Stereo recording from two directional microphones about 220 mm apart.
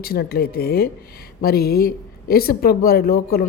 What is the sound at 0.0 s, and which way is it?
Speech, 45° left (ahead or behind).